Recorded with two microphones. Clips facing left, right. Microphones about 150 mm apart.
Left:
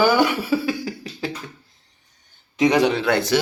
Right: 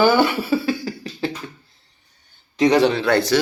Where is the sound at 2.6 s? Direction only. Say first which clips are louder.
Right 2 dB; 10° left (ahead or behind).